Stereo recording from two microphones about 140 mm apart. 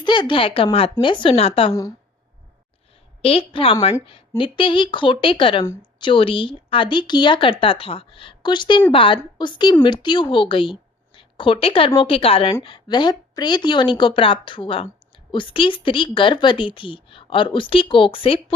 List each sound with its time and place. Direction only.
0.0 s a woman's voice: 35° left (ahead or behind)
3.2 s a woman's voice: 40° left (ahead or behind)